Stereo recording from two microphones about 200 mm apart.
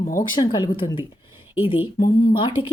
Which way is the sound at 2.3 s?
25° left (ahead or behind).